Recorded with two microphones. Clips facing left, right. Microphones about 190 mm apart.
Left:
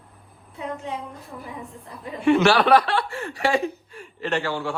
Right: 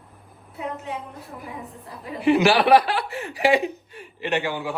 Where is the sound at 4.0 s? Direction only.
5° right (ahead or behind).